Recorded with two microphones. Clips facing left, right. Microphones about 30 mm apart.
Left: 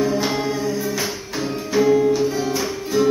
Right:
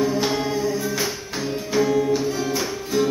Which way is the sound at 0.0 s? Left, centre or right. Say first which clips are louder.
Left 1 dB; centre.